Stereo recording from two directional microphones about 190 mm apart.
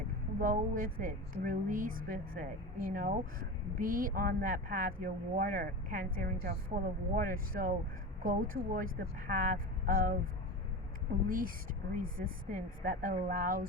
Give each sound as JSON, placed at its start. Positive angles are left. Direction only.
{"t": 0.3, "sound": "speech", "side_deg": -45}
{"t": 11.3, "sound": "speech", "side_deg": -50}